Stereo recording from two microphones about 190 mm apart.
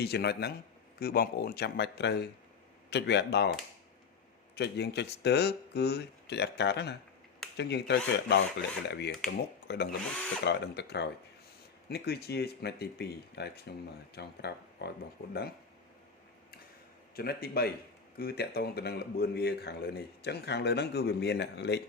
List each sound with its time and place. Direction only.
0.0 s speech: 60° left (ahead or behind)
4.5 s speech: 60° left (ahead or behind)
17.2 s speech: 55° left (ahead or behind)